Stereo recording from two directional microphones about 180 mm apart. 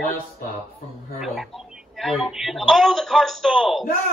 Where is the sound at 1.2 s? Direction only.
Centre (ahead or behind).